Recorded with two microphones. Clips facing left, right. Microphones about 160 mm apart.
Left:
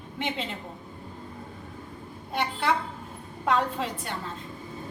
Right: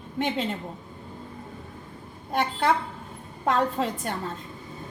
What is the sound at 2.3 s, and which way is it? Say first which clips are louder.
Speech: right 4 dB; 45° right (ahead or behind).